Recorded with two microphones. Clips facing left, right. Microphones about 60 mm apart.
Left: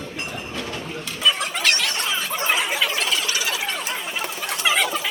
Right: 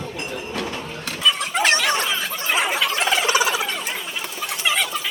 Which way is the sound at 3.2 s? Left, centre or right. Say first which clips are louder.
Right 6 dB; right.